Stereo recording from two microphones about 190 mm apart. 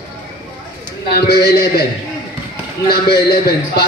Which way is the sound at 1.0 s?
55° left (ahead or behind).